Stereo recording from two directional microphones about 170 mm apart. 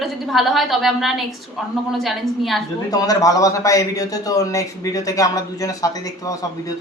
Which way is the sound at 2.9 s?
20° left (ahead or behind).